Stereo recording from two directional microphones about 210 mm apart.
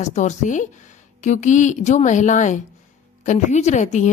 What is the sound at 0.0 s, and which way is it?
A woman's voice, 35° left (ahead or behind).